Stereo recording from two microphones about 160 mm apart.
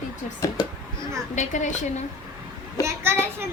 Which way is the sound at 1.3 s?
50° left (ahead or behind).